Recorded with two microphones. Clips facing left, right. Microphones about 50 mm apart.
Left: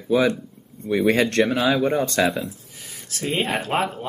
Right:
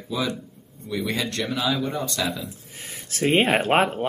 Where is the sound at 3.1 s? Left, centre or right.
Right.